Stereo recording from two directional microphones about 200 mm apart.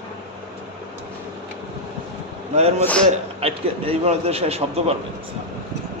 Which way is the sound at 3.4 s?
30° right (ahead or behind).